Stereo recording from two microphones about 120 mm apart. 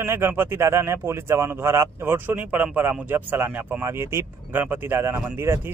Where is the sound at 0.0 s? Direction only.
20° right (ahead or behind).